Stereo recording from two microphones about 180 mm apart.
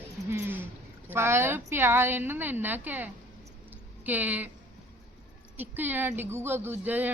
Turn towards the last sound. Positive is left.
turn(degrees=-10)  # may be behind; listen again after turning